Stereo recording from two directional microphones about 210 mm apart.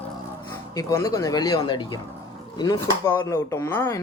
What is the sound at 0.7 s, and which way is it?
Speech, 15° left (ahead or behind).